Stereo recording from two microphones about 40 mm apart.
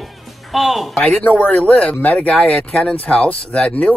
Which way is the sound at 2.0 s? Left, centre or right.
Left.